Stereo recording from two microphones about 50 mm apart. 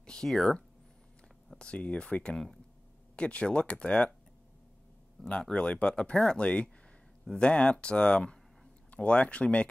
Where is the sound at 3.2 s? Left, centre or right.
Left.